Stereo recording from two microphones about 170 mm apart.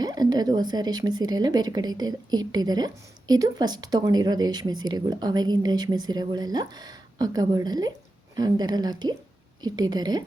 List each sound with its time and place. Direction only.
0.0 s speech: 25° right (ahead or behind)